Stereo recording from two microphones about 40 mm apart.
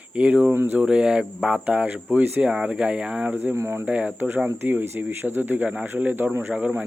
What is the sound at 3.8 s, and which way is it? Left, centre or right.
Speech, right.